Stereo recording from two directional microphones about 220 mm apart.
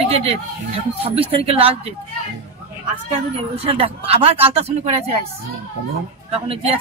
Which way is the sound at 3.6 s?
25° right (ahead or behind).